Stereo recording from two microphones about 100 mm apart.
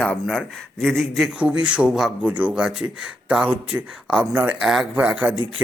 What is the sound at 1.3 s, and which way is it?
Speech, 10° right (ahead or behind).